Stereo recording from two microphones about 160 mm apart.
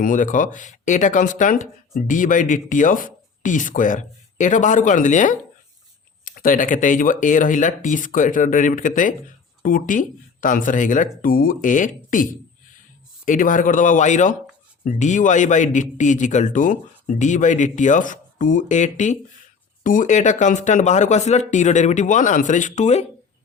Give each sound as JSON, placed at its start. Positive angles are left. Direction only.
{"t": 0.0, "sound": "a man's voice", "side_deg": 55}